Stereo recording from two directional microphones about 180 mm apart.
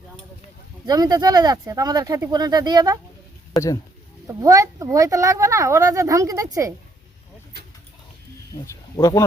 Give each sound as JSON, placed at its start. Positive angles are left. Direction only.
{"t": 0.9, "sound": "speech", "side_deg": -20}
{"t": 4.3, "sound": "speech", "side_deg": -20}
{"t": 8.6, "sound": "speech", "side_deg": 20}